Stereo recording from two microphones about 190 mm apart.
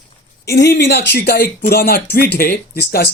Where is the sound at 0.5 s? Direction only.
60° left (ahead or behind).